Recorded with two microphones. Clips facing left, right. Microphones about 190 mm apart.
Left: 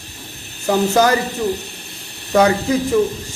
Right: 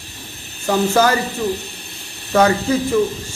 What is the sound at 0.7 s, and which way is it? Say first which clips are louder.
Speech: left 1 dB; 15° left (ahead or behind).